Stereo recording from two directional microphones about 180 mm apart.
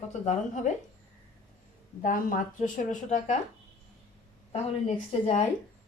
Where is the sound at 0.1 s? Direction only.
40° left (ahead or behind).